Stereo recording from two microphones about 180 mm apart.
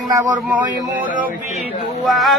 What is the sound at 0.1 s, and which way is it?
Speech, 15° right (ahead or behind).